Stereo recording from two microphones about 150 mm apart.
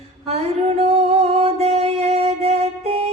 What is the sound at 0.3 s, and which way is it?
Music, 45° right (ahead or behind).